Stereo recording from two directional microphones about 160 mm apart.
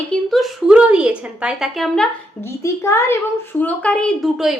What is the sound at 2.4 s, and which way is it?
A child's voice, 20° left (ahead or behind).